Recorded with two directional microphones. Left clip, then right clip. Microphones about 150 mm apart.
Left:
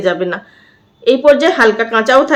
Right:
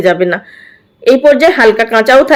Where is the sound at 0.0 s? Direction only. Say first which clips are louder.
Right 5 dB; 30° right (ahead or behind).